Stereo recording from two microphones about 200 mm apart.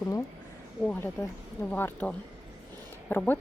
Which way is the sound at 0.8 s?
5° left (ahead or behind).